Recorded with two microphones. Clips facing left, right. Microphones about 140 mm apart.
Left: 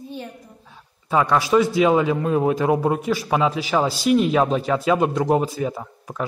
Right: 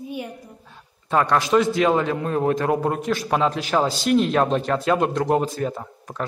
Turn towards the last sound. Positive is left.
turn(degrees=5)  # may be behind; listen again after turning